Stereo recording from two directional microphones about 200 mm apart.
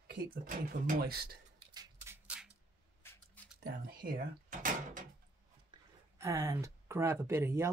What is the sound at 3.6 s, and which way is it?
Speech, 45° right (ahead or behind).